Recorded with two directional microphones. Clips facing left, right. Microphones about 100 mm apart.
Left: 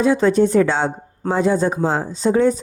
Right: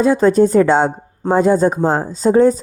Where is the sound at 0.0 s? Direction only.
40° right (ahead or behind).